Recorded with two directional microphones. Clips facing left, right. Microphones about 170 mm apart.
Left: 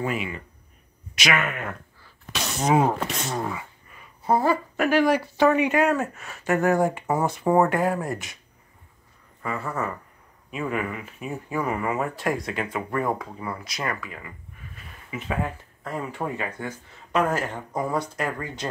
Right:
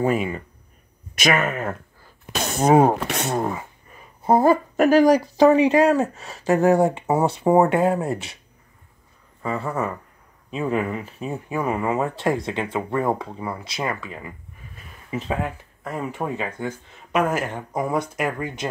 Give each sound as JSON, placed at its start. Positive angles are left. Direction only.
{"t": 0.0, "sound": "speech", "side_deg": -45}
{"t": 1.1, "sound": "a sound", "side_deg": -45}
{"t": 3.1, "sound": "speech", "side_deg": -65}
{"t": 9.4, "sound": "speech", "side_deg": -25}
{"t": 11.4, "sound": "speech", "side_deg": -20}